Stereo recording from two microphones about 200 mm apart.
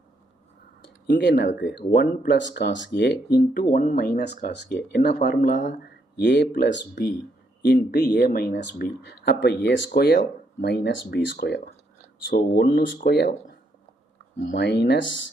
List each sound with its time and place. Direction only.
1.0 s speech: 55° left (ahead or behind); by 5.7 s 40° left (ahead or behind)
6.1 s speech: 60° left (ahead or behind)
14.4 s speech: 60° left (ahead or behind)